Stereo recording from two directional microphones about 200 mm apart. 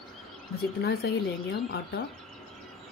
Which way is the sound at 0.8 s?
55° left (ahead or behind).